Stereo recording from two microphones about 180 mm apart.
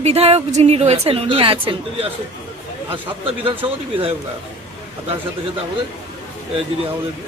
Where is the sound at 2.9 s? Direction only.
30° right (ahead or behind).